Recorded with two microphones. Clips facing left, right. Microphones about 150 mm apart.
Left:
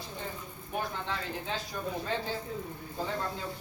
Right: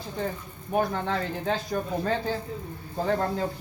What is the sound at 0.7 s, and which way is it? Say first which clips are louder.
Speech: right 9 dB; 50° right (ahead or behind).